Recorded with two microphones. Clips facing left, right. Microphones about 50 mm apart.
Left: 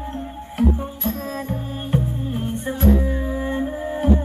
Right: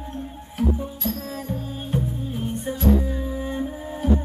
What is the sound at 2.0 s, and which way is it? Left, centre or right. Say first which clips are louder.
Music: left 2 dB; left.